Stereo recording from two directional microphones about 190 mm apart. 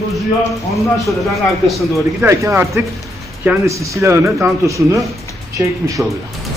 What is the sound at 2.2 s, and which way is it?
Speech, 15° right (ahead or behind).